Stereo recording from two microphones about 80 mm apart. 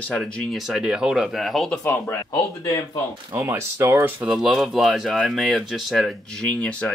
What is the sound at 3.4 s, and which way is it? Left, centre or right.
Speech, right.